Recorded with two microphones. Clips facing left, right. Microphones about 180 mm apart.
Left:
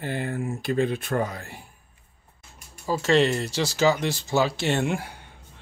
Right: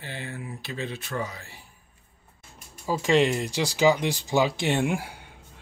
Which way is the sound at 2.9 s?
15° right (ahead or behind).